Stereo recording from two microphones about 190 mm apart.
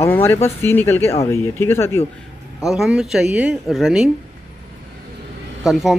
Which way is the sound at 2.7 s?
Centre (ahead or behind).